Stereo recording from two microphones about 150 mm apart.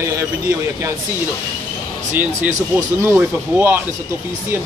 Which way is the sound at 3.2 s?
15° right (ahead or behind).